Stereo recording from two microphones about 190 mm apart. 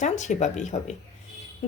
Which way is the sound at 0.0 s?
40° left (ahead or behind).